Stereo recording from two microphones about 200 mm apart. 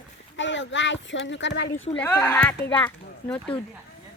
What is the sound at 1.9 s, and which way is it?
Speech, 10° left (ahead or behind).